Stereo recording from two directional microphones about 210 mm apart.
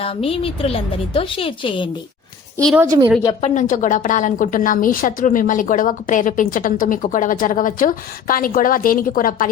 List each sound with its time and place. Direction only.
0.0 s a woman's voice: 25° left (ahead or behind)
2.6 s a woman's voice: centre (ahead or behind)
2.8 s a woman's voice: 15° right (ahead or behind)
3.4 s a woman's voice: 35° left (ahead or behind)